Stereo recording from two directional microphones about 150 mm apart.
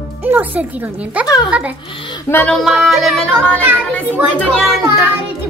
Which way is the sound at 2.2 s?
10° left (ahead or behind).